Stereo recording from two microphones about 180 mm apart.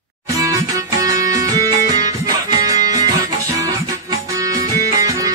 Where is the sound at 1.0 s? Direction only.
20° right (ahead or behind).